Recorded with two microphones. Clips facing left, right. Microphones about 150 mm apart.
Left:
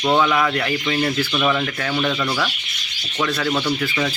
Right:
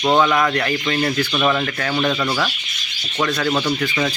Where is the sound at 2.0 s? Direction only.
15° right (ahead or behind).